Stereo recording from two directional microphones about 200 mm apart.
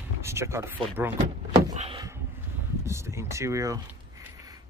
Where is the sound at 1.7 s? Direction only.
30° right (ahead or behind).